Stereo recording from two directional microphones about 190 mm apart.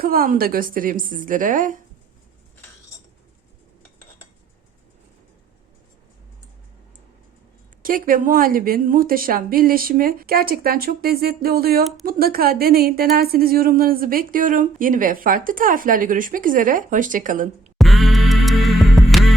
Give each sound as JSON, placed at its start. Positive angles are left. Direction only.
{"t": 0.0, "sound": "a woman's voice", "side_deg": -50}
{"t": 7.8, "sound": "a woman's voice", "side_deg": -45}
{"t": 17.7, "sound": "music", "side_deg": 0}